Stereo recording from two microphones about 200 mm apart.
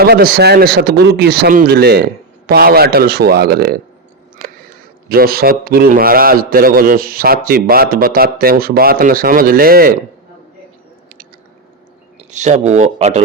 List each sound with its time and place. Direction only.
0.0 s speech: 50° right (ahead or behind)
12.3 s speech: 35° right (ahead or behind)